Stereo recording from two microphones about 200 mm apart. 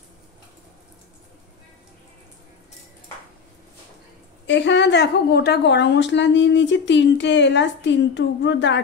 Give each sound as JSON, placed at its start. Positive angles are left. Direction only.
{"t": 4.5, "sound": "a woman's voice", "side_deg": 60}